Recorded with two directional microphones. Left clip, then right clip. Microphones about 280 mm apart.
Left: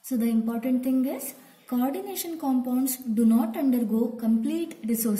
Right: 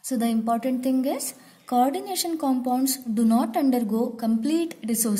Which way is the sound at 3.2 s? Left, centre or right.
Right.